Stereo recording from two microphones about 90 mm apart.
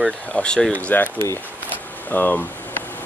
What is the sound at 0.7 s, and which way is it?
Speech, 20° left (ahead or behind).